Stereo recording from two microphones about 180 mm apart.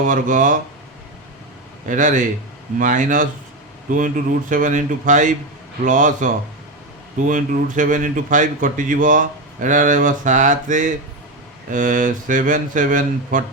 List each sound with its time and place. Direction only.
0.1 s a man's voice: 45° right (ahead or behind)
1.9 s a man's voice: 45° right (ahead or behind)